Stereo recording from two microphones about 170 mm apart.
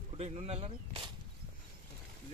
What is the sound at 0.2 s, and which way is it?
Speech, 40° right (ahead or behind).